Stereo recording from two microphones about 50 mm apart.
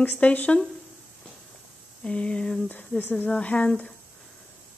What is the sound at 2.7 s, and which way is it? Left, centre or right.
Speech, left.